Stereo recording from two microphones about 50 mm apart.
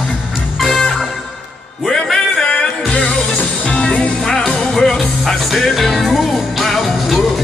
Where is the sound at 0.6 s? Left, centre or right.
Centre.